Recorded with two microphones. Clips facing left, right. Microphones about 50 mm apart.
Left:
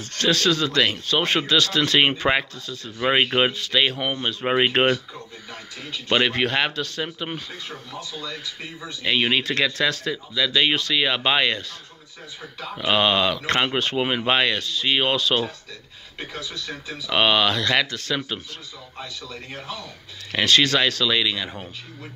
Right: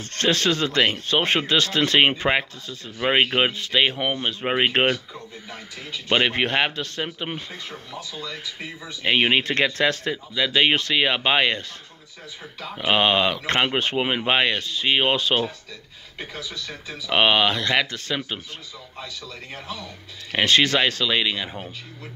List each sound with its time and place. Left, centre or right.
0.0 s speech: right
9.0 s speech: right
12.7 s speech: right
17.1 s speech: centre
20.3 s speech: right